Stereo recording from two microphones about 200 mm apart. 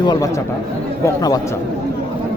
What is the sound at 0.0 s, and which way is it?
Speech, 20° left (ahead or behind).